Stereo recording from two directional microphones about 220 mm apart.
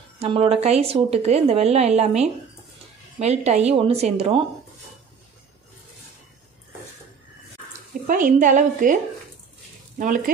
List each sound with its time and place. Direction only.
0.2 s a woman's voice: 25° right (ahead or behind)
8.1 s a woman's voice: 35° right (ahead or behind)
9.9 s a woman's voice: 40° right (ahead or behind)